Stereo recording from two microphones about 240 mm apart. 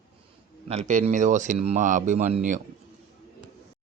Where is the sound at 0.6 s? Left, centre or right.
Right.